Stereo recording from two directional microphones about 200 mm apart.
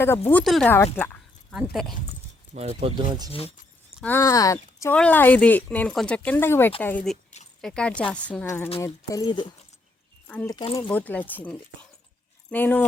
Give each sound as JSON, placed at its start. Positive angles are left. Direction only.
{"t": 0.3, "sound": "speech", "side_deg": 5}
{"t": 0.9, "sound": "a sound", "side_deg": 10}
{"t": 1.6, "sound": "speech", "side_deg": 0}
{"t": 2.6, "sound": "speech", "side_deg": -30}
{"t": 3.3, "sound": "speech", "side_deg": 30}
{"t": 4.0, "sound": "speech", "side_deg": 15}
{"t": 10.2, "sound": "speech", "side_deg": 5}
{"t": 10.5, "sound": "speech", "side_deg": 20}
{"t": 10.8, "sound": "speech", "side_deg": 10}